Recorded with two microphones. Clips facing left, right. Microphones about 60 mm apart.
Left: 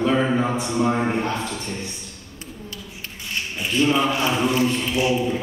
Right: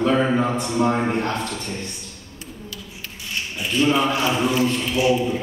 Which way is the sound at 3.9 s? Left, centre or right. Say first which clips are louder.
Right 2 dB; centre.